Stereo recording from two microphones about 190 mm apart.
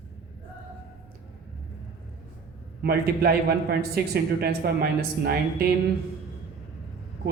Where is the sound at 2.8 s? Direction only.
55° right (ahead or behind).